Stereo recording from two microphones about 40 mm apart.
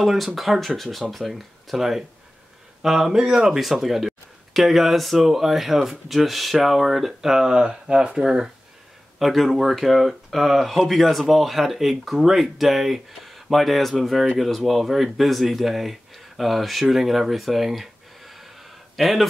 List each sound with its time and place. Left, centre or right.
0.0 s speech: centre
7.2 s speech: centre
9.2 s speech: centre
16.8 s a sound: centre